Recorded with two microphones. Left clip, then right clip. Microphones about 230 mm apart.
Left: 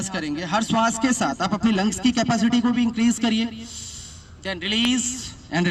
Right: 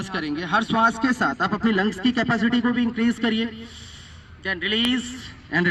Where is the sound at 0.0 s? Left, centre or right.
Left.